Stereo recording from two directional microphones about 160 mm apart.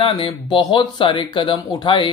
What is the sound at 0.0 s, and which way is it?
Speech, 30° left (ahead or behind).